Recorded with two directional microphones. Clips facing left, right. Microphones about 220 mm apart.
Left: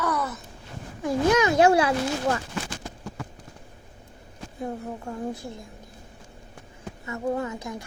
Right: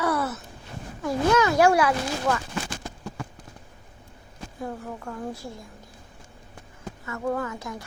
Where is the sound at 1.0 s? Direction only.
20° left (ahead or behind).